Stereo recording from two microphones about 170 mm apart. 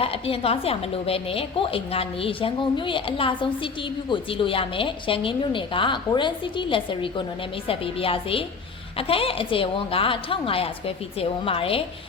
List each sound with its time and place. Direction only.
0.0 s a woman's voice: 35° left (ahead or behind)